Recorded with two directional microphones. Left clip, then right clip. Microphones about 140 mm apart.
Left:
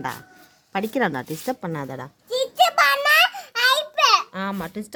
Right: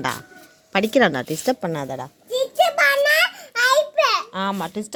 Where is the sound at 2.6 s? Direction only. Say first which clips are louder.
Right 1 dB; 35° left (ahead or behind).